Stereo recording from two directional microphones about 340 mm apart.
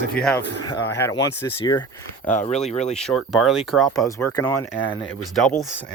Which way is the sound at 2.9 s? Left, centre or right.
Centre.